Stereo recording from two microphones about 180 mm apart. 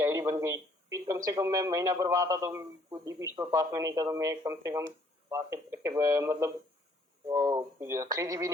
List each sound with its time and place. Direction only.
0.0 s speech: 15° right (ahead or behind)